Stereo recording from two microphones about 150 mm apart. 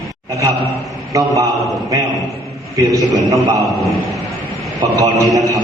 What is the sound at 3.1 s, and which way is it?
Speech, 20° right (ahead or behind).